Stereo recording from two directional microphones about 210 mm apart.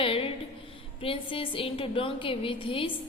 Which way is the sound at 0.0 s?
25° left (ahead or behind).